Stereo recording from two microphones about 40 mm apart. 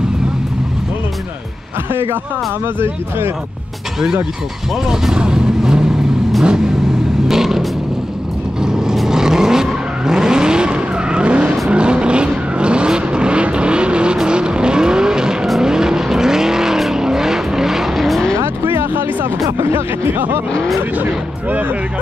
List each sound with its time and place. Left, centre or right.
4.8 s vehicle: centre
7.2 s vehicle: centre
18.4 s a sound: right
21.0 s speech: right